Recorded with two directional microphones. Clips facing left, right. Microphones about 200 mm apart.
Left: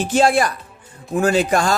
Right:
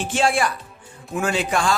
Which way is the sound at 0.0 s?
40° left (ahead or behind).